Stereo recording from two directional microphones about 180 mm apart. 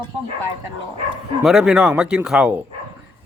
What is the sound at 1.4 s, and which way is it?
Speech, 5° right (ahead or behind).